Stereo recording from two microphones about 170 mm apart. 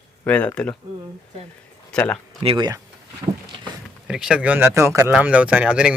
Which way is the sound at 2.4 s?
35° right (ahead or behind).